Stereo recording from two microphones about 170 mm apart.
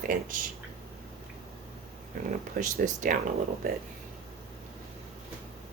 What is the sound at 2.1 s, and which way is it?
Speech, 50° right (ahead or behind).